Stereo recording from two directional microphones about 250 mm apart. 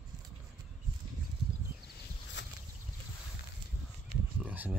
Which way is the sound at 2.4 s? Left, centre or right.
Left.